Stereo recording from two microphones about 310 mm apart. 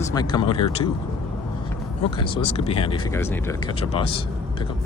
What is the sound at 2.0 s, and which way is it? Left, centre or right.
Speech, centre.